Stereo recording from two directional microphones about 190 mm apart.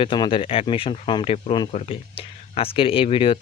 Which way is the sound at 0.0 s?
25° left (ahead or behind).